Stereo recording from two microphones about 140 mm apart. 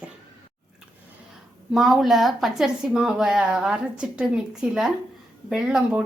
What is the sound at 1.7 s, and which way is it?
A woman's voice, centre (ahead or behind).